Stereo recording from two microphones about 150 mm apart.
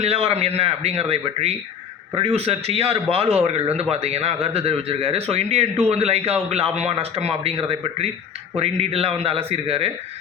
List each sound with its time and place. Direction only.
0.0 s speech: 40° right (ahead or behind)